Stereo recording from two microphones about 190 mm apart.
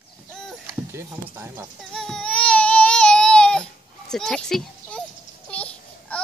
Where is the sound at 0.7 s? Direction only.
15° right (ahead or behind).